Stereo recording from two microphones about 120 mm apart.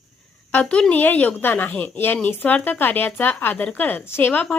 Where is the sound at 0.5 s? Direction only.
10° left (ahead or behind).